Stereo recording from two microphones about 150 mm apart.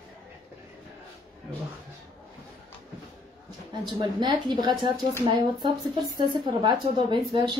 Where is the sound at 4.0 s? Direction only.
30° right (ahead or behind).